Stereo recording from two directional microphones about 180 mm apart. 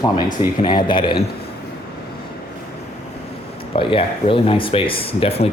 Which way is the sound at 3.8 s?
30° left (ahead or behind).